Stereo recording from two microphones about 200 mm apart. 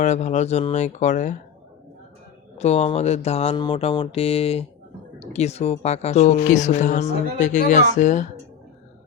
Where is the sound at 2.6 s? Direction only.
35° left (ahead or behind).